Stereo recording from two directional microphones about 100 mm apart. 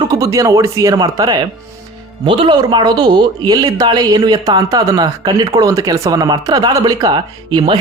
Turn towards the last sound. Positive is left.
turn(degrees=-45)  # may be behind; listen again after turning